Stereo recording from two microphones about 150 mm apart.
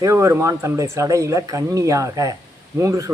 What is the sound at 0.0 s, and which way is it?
Speech, 20° right (ahead or behind).